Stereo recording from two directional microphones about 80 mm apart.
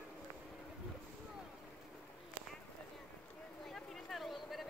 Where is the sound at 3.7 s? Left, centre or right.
Centre.